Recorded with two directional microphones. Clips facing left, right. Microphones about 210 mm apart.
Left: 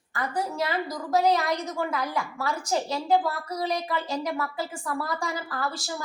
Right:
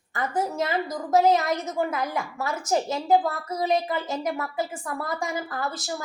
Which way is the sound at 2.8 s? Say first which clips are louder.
Right 1 dB; 20° right (ahead or behind).